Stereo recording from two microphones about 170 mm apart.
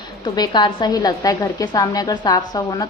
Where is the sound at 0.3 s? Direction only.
25° left (ahead or behind).